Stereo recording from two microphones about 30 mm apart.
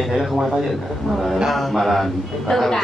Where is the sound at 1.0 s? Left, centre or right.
Centre.